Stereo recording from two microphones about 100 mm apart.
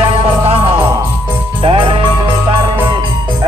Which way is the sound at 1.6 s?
65° right (ahead or behind).